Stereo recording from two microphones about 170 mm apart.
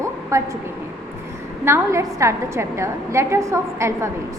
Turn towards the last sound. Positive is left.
turn(degrees=-15)  # may be behind; listen again after turning